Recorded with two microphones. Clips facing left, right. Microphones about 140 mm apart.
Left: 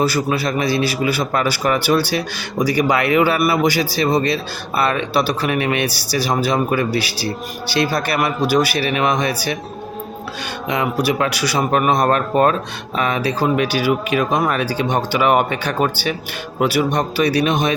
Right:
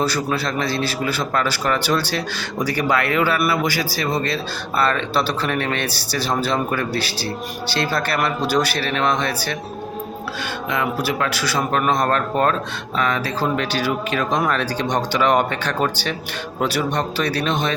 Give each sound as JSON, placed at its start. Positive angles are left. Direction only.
{"t": 0.0, "sound": "a man's voice", "side_deg": 5}
{"t": 10.7, "sound": "a man's voice", "side_deg": 20}